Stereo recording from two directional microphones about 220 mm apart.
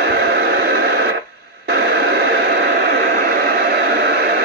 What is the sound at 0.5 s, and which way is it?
Radio, 45° right (ahead or behind).